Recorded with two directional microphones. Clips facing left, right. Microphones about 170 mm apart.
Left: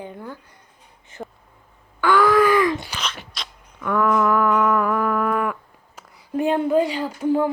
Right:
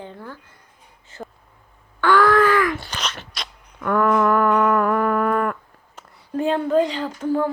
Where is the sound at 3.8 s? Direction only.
45° right (ahead or behind).